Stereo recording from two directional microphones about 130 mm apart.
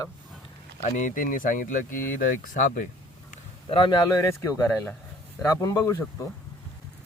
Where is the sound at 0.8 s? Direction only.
75° left (ahead or behind); by 2.9 s 90° left.